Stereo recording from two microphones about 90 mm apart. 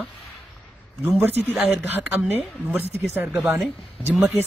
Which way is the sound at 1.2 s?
20° right (ahead or behind).